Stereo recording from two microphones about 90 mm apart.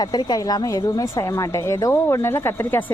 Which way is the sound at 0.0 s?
50° left (ahead or behind).